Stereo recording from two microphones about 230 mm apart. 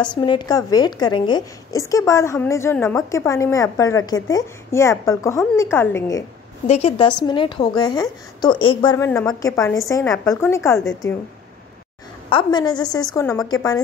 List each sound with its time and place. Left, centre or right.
0.0 s a woman's voice: centre
6.7 s a woman's voice: left
12.3 s a woman's voice: centre